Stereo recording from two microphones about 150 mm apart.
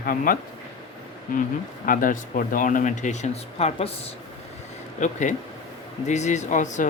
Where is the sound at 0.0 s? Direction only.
70° left (ahead or behind).